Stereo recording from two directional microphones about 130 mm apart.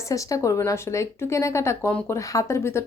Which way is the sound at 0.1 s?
25° left (ahead or behind).